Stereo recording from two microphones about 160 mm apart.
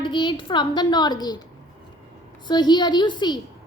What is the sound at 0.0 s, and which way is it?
A woman's voice, 30° left (ahead or behind).